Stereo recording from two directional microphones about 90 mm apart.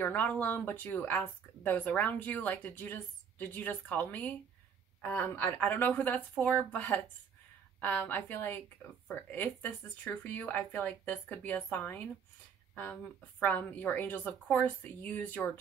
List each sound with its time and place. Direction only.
0.0 s a woman's voice: 20° left (ahead or behind)
13.4 s a woman's voice: 20° left (ahead or behind)